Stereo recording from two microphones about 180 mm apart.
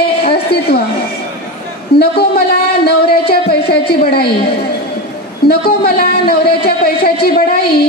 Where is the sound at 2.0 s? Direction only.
60° left (ahead or behind).